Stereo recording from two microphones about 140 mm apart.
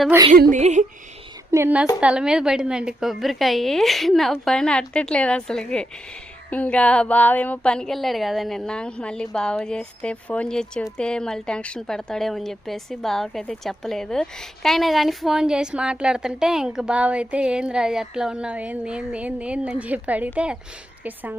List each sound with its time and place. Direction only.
0.5 s a sound: 60° right (ahead or behind)
1.5 s a woman's voice: 15° right (ahead or behind)
2.0 s speech: 5° right (ahead or behind)